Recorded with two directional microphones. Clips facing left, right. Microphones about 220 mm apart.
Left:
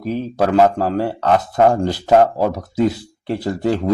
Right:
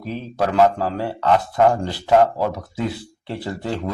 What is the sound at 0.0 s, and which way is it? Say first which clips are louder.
Speech: left 5 dB; 45° left (ahead or behind).